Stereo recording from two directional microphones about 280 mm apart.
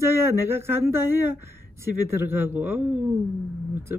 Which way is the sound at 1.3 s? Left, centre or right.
Right.